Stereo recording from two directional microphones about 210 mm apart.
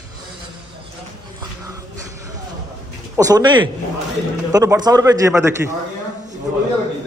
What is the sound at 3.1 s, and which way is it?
A man's voice, 15° right (ahead or behind).